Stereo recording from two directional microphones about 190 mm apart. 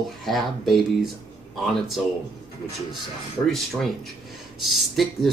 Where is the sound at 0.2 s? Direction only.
Centre (ahead or behind).